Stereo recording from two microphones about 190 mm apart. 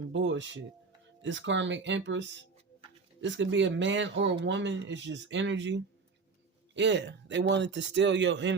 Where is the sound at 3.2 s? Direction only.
75° right (ahead or behind).